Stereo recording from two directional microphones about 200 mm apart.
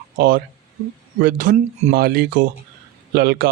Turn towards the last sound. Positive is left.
turn(degrees=-50)  # may be behind; listen again after turning